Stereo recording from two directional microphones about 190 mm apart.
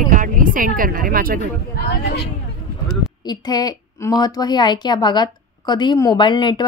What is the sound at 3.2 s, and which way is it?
A woman's voice, 20° left (ahead or behind).